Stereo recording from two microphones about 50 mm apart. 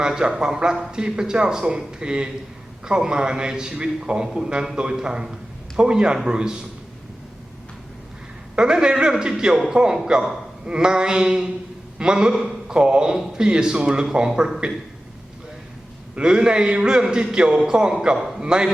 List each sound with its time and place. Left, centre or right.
0.0 s speech: centre
8.5 s a sound: centre
9.4 s speech: centre
16.1 s a man's voice: centre